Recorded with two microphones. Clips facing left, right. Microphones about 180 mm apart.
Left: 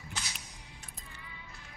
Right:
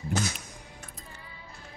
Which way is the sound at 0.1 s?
50° right (ahead or behind).